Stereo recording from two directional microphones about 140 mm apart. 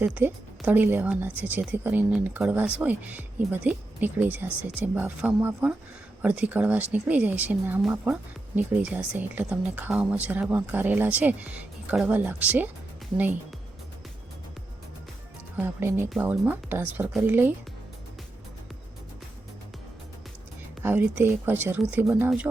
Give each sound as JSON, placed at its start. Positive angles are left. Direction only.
{"t": 0.0, "sound": "speech", "side_deg": -10}
{"t": 15.5, "sound": "speech", "side_deg": -15}
{"t": 20.8, "sound": "speech", "side_deg": -15}